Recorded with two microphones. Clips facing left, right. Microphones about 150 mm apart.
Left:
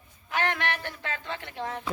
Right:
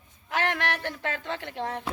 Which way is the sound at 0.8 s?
70° right (ahead or behind).